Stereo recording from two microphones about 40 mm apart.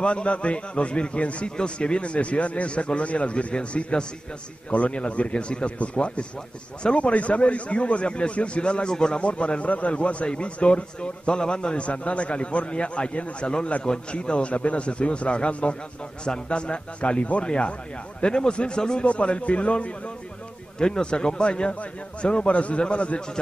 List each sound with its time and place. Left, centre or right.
0.0 s a man's voice: left
19.0 s a man's voice: left